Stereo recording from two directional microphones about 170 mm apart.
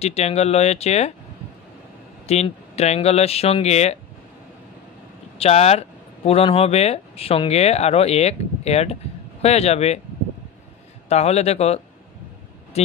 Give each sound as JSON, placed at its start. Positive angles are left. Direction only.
{"t": 0.0, "sound": "speech", "side_deg": 40}
{"t": 2.2, "sound": "speech", "side_deg": 40}
{"t": 5.4, "sound": "speech", "side_deg": 40}
{"t": 11.1, "sound": "speech", "side_deg": 40}